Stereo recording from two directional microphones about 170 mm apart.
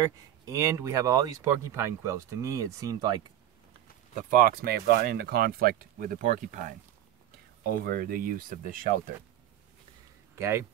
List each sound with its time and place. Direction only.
0.0 s speech: 15° right (ahead or behind)
4.3 s speech: 60° right (ahead or behind)
7.8 s speech: 60° right (ahead or behind)
10.3 s speech: 15° right (ahead or behind)